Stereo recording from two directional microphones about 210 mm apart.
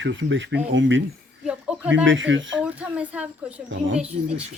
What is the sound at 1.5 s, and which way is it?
Speech, 5° right (ahead or behind).